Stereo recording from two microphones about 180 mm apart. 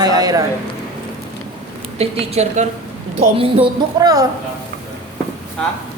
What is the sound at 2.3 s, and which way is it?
A woman's voice, 35° right (ahead or behind).